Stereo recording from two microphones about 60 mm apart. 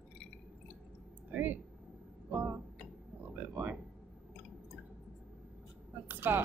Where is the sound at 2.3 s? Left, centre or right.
Right.